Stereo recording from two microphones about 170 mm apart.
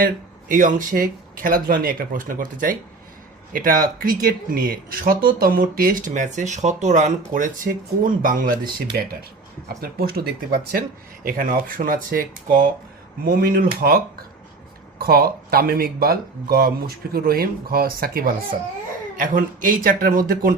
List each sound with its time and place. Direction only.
0.4 s speech: 50° right (ahead or behind)
11.2 s speech: 55° right (ahead or behind)